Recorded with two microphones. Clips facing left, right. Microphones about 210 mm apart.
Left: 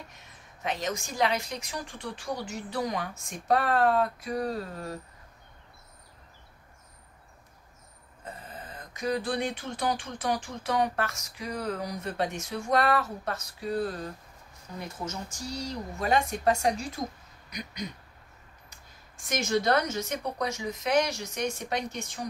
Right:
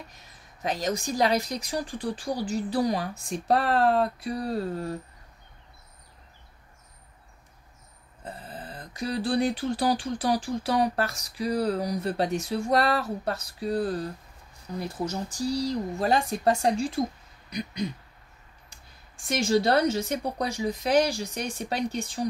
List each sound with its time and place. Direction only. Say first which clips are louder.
0.1 s speech: even; 35° right (ahead or behind)
8.2 s speech: right 3 dB; 35° right (ahead or behind)
19.2 s speech: right 3 dB; 30° right (ahead or behind)